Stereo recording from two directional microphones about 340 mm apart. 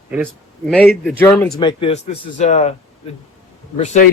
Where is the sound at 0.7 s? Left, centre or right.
Centre.